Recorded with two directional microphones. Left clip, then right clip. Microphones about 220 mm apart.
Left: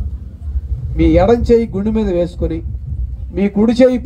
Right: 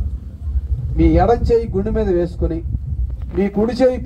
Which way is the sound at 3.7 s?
35° left (ahead or behind).